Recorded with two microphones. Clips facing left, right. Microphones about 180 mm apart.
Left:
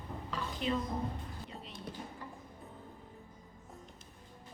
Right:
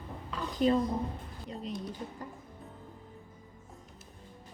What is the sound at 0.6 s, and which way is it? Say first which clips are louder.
Speech: right 9 dB; 40° right (ahead or behind).